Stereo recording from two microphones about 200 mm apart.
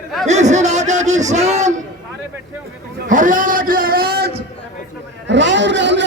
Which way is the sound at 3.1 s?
40° right (ahead or behind).